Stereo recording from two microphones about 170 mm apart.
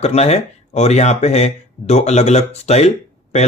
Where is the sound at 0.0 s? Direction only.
40° left (ahead or behind).